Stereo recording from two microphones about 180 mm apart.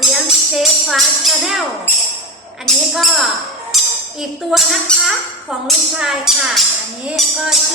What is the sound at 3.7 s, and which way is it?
Music, centre (ahead or behind).